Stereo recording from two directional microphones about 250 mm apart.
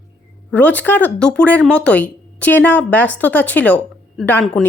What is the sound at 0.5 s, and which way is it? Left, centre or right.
A woman's voice, centre.